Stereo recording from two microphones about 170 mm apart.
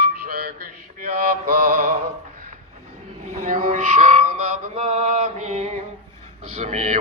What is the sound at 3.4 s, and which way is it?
Music, 50° right (ahead or behind).